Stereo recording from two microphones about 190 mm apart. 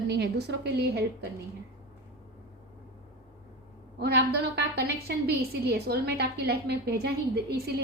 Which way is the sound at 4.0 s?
60° right (ahead or behind).